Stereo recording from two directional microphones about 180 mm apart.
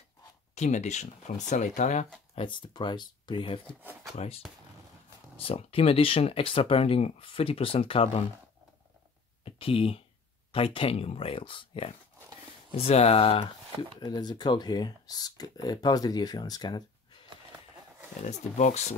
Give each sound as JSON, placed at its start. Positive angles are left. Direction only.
{"t": 0.6, "sound": "speech", "side_deg": 40}
{"t": 2.3, "sound": "speech", "side_deg": 25}
{"t": 5.4, "sound": "speech", "side_deg": 30}
{"t": 9.4, "sound": "speech", "side_deg": 30}
{"t": 18.2, "sound": "speech", "side_deg": 40}